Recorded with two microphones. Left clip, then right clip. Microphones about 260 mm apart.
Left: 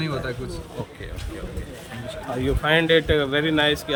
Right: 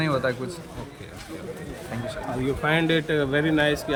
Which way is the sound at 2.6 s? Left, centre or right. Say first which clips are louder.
Left 5 dB; centre.